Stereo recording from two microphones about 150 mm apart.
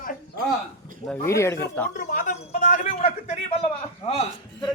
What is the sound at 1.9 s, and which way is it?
A man's voice, 65° left (ahead or behind).